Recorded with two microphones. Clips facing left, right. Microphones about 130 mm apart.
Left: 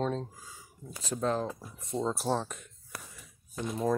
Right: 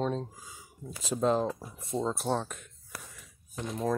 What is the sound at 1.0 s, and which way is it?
Speech, 20° right (ahead or behind).